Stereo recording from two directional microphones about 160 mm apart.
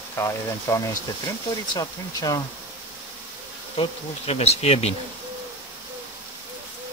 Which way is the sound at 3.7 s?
40° left (ahead or behind).